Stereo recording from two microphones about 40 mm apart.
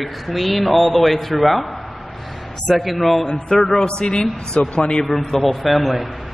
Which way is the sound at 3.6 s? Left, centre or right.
Centre.